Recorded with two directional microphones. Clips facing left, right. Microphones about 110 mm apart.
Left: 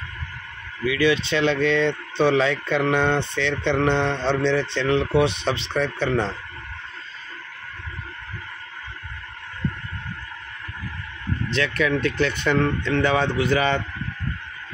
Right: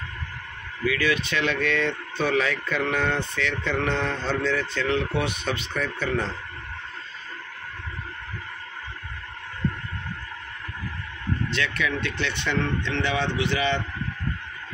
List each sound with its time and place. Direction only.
0.8 s speech: 25° left (ahead or behind)
11.5 s speech: 40° left (ahead or behind)